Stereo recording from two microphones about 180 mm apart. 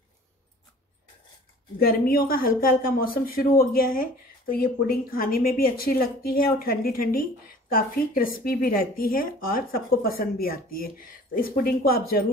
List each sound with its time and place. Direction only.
1.8 s speech: 55° left (ahead or behind)